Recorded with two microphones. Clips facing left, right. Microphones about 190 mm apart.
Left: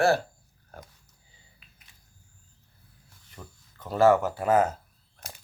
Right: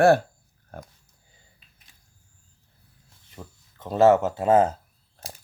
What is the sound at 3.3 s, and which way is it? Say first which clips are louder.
Speech: right 4 dB; 20° right (ahead or behind).